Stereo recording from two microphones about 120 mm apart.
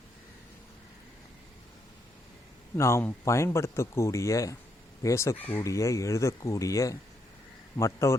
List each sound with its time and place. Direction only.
2.7 s speech: 20° left (ahead or behind)